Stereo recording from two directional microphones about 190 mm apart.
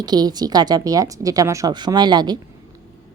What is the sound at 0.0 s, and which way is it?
Speech, 20° right (ahead or behind).